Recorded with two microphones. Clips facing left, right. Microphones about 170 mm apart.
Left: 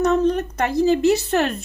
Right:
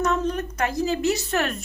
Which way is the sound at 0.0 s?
35° left (ahead or behind).